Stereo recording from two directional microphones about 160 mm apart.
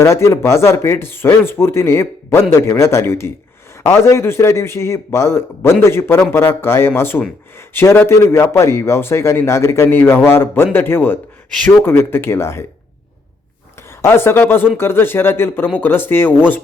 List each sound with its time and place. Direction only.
0.0 s a man's voice: 15° left (ahead or behind)
14.0 s a man's voice: 15° left (ahead or behind)